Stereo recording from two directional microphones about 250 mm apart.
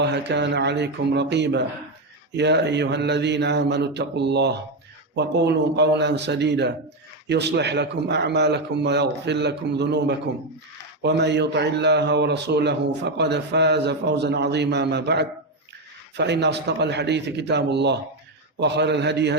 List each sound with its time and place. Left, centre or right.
0.0 s a man's voice: right